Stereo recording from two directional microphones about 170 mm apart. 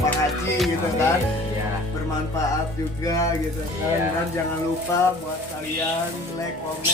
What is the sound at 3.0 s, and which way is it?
Speech, 20° left (ahead or behind).